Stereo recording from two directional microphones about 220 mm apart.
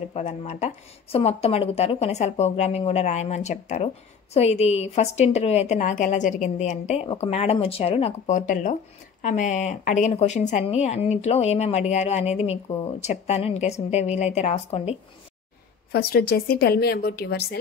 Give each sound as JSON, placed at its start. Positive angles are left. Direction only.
{"t": 0.1, "sound": "speech", "side_deg": 30}
{"t": 15.9, "sound": "a woman's voice", "side_deg": 45}